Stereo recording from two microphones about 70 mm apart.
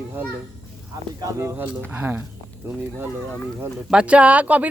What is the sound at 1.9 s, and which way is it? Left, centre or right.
Speech, right.